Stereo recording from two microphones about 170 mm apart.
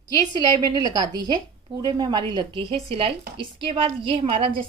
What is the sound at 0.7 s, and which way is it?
A woman's voice, 25° right (ahead or behind).